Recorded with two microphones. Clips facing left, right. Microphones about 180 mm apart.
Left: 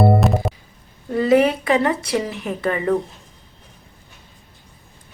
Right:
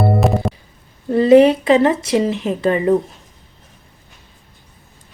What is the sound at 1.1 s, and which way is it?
Speech, 25° right (ahead or behind).